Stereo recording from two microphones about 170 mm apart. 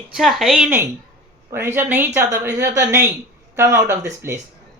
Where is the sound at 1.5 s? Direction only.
15° right (ahead or behind).